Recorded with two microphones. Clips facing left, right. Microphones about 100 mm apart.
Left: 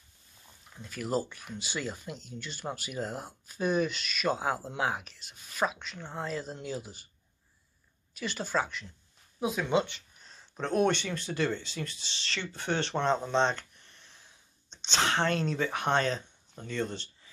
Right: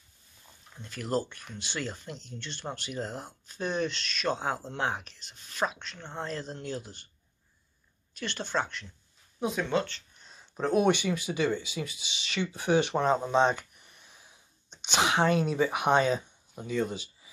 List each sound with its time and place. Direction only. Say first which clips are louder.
0.7 s speech: right 1 dB; centre (ahead or behind)
8.1 s speech: left 1 dB; 5° left (ahead or behind)
9.7 s speech: left 1 dB; 15° left (ahead or behind)
10.1 s speech: right 3 dB; centre (ahead or behind)